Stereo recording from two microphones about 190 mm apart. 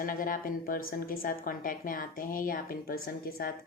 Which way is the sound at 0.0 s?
45° left (ahead or behind).